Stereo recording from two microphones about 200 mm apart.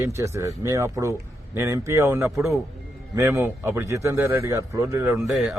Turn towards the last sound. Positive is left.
turn(degrees=0)  # may be behind; listen again after turning